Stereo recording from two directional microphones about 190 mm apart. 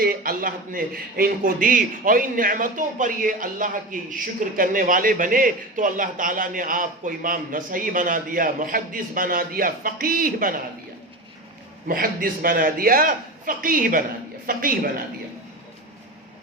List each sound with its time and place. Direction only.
0.0 s a man's voice: 50° right (ahead or behind)
11.9 s a man's voice: 50° right (ahead or behind)